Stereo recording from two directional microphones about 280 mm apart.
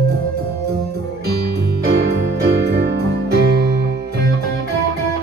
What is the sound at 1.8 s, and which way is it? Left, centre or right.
Music, right.